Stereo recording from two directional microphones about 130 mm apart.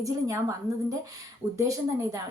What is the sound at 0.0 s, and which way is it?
A woman's voice, 25° right (ahead or behind).